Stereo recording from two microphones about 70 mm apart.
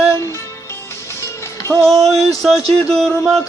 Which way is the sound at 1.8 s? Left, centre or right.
Centre.